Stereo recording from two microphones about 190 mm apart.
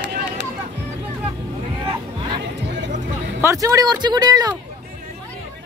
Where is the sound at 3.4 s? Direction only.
15° right (ahead or behind).